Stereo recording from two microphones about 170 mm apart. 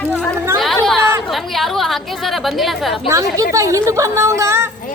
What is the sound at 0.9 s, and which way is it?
Chatter, centre (ahead or behind).